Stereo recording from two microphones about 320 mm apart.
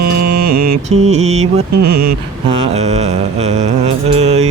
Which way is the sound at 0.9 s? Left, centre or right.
Right.